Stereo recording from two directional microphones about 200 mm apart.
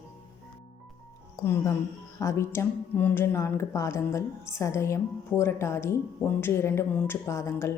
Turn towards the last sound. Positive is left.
turn(degrees=15)  # may be behind; listen again after turning